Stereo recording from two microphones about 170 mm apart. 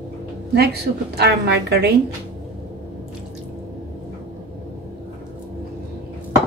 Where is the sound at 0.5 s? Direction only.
70° right (ahead or behind).